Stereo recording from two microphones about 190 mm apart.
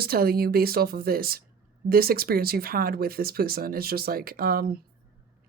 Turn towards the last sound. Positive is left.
turn(degrees=-50)  # may be behind; listen again after turning